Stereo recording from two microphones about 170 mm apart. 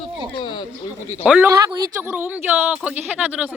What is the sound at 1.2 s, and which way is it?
Speech, 5° right (ahead or behind).